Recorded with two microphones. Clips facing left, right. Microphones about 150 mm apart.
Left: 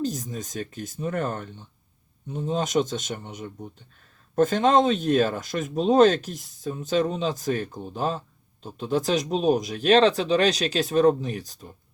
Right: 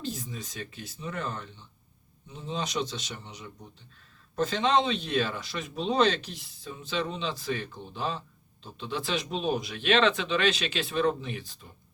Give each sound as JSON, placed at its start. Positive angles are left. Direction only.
{"t": 0.0, "sound": "speech", "side_deg": 40}